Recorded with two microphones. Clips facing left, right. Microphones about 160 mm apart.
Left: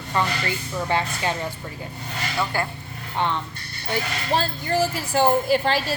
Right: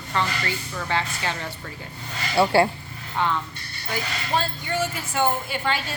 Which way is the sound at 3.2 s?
20° left (ahead or behind).